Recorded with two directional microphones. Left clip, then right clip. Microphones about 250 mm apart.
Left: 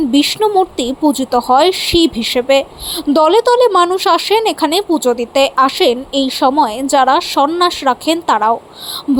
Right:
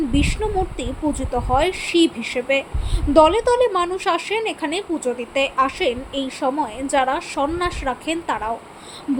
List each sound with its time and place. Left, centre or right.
0.1 s speech: left